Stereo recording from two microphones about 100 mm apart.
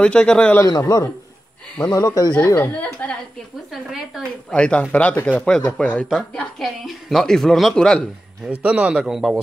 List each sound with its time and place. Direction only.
0.0 s a woman's voice: 10° left (ahead or behind)
0.7 s a man's voice: 40° left (ahead or behind)
2.5 s a woman's voice: 20° left (ahead or behind)
3.7 s speech: 5° right (ahead or behind)
4.5 s a woman's voice: 10° left (ahead or behind)
6.0 s speech: centre (ahead or behind)
8.5 s a man's voice: 15° right (ahead or behind)